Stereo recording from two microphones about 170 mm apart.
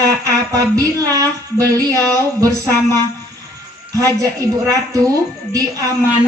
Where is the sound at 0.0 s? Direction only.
20° right (ahead or behind).